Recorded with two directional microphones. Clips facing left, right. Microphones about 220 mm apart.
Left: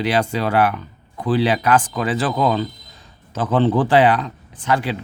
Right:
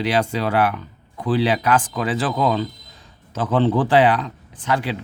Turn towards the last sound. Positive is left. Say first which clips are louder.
# left 2 dB
turn(degrees=45)  # may be behind; listen again after turning